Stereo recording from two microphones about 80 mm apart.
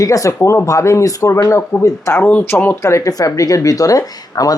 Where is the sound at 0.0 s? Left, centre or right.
Left.